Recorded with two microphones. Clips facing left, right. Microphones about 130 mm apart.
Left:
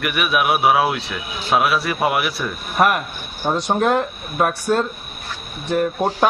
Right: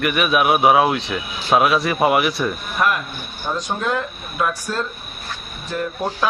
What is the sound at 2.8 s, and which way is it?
Speech, 35° left (ahead or behind).